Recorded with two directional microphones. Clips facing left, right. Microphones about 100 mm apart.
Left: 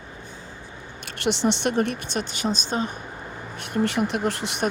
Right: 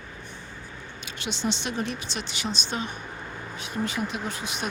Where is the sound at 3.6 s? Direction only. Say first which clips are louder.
Left 6 dB; 65° left (ahead or behind).